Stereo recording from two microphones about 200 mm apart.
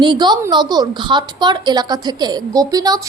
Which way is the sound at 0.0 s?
20° right (ahead or behind).